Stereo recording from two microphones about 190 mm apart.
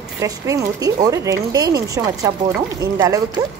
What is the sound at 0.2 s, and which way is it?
Speech, 15° right (ahead or behind).